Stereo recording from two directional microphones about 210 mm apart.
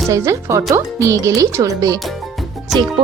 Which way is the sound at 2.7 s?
Centre (ahead or behind).